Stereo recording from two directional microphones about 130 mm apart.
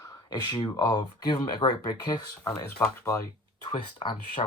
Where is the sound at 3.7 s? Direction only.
40° left (ahead or behind).